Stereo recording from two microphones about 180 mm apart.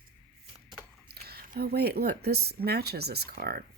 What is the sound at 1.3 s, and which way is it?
Speech, 60° right (ahead or behind).